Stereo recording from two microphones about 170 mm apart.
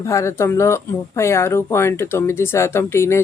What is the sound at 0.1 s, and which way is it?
Speech, 15° left (ahead or behind).